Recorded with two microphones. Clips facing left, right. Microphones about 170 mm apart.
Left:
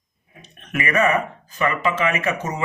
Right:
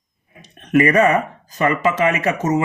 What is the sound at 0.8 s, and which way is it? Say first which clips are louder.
Speech: right 6 dB; 40° right (ahead or behind).